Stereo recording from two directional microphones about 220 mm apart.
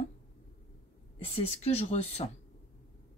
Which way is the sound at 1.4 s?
25° left (ahead or behind).